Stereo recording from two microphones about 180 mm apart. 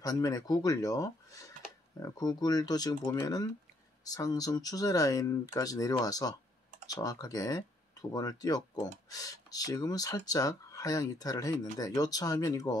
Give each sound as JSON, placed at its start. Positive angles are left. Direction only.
{"t": 0.0, "sound": "speech", "side_deg": 20}